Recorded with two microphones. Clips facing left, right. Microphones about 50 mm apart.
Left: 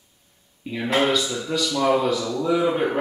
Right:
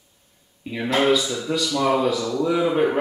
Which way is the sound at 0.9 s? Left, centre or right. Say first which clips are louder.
Right 2 dB; centre.